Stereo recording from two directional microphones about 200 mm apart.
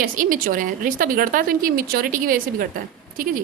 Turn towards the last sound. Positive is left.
turn(degrees=-45)  # may be behind; listen again after turning